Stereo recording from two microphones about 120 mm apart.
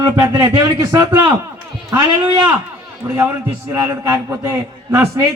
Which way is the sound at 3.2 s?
15° right (ahead or behind).